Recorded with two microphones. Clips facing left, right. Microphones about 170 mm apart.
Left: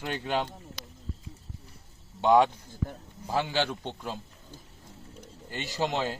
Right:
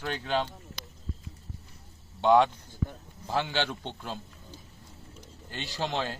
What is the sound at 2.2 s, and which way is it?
A man's voice, 10° left (ahead or behind).